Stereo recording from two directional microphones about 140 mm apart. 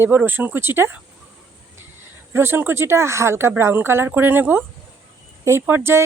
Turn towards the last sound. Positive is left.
turn(degrees=-15)  # may be behind; listen again after turning